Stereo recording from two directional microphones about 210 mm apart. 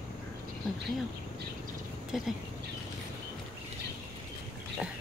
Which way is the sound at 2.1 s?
Centre (ahead or behind).